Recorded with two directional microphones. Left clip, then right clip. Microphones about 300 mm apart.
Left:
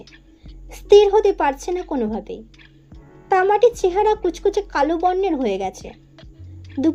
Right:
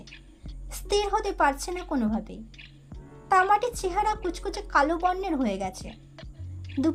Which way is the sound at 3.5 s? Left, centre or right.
Centre.